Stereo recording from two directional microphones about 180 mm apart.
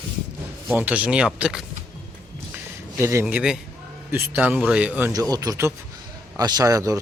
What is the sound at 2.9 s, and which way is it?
Speech, 15° right (ahead or behind).